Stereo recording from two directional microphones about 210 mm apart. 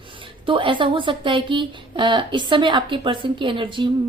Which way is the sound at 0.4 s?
25° right (ahead or behind).